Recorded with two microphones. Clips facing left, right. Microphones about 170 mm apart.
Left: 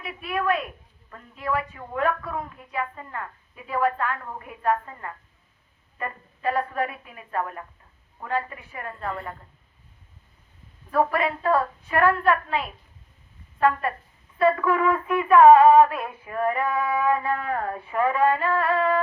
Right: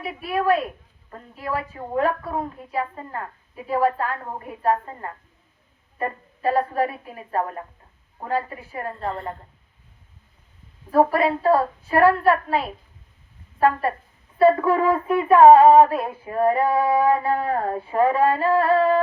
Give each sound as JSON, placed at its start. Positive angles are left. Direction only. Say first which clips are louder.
{"t": 0.0, "sound": "female singing", "louder": "right 4 dB", "side_deg": -30}
{"t": 10.9, "sound": "female singing", "louder": "right 5 dB", "side_deg": -35}